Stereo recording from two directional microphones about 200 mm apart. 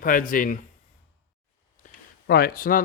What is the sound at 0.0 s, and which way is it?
Speech, 45° left (ahead or behind).